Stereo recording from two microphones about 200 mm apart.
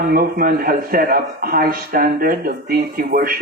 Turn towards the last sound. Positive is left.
turn(degrees=-45)  # may be behind; listen again after turning